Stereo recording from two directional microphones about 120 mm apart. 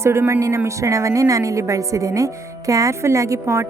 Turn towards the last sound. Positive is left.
turn(degrees=-25)  # may be behind; listen again after turning